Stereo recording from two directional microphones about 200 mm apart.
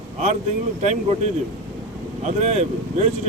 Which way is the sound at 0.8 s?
35° right (ahead or behind).